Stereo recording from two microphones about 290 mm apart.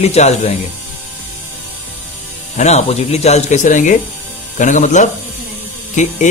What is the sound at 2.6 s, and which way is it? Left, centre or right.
Speech, left.